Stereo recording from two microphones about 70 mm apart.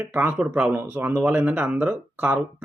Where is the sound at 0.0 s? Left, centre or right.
Right.